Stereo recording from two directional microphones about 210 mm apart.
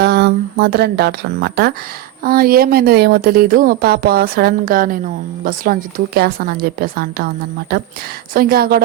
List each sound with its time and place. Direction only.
0.0 s speech: 50° right (ahead or behind)